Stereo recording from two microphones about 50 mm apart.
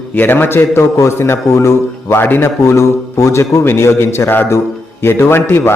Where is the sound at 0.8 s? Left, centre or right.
Left.